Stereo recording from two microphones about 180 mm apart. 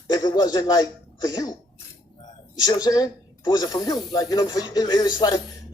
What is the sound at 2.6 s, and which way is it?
Speech, 20° left (ahead or behind).